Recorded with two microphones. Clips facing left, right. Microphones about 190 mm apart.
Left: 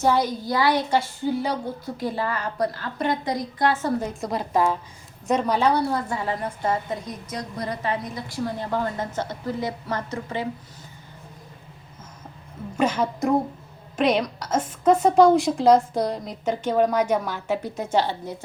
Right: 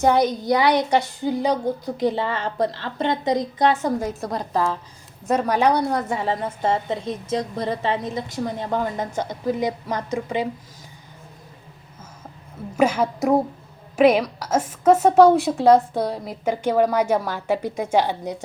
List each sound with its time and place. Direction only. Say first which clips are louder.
0.2 s a woman's voice: right 4 dB; 20° right (ahead or behind)
4.2 s a woman's voice: even; centre (ahead or behind)
4.5 s speech: left 2 dB; 15° left (ahead or behind)
5.2 s a woman's voice: right 2 dB; 5° right (ahead or behind)
12.8 s a woman's voice: right 3 dB; 10° right (ahead or behind)